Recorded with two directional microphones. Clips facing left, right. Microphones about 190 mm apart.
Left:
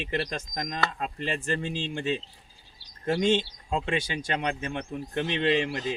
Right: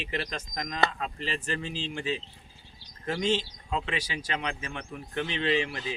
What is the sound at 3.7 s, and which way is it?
Speech, 50° left (ahead or behind).